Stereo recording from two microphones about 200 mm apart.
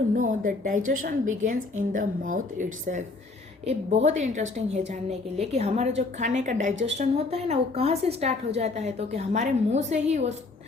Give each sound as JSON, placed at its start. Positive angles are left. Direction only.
{"t": 0.1, "sound": "a woman's voice", "side_deg": -40}